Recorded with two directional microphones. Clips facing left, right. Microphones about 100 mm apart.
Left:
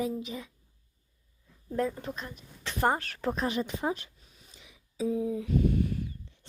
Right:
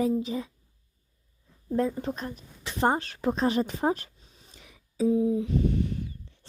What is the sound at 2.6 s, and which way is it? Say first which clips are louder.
Speech: right 2 dB; 25° right (ahead or behind).